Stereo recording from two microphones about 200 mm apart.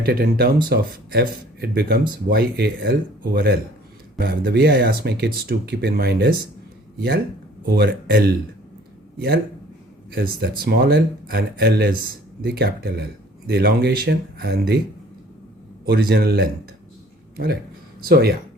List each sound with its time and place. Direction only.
0.0 s speech: 50° right (ahead or behind)
7.8 s speech: 50° right (ahead or behind)
15.9 s speech: 50° right (ahead or behind)